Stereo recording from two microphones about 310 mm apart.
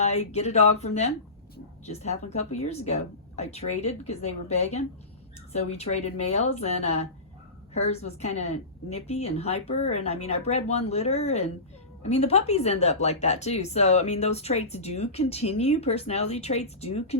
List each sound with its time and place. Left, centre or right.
0.0 s speech: left